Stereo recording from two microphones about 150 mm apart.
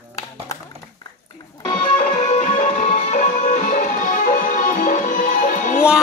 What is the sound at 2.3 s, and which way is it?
Music, 50° left (ahead or behind).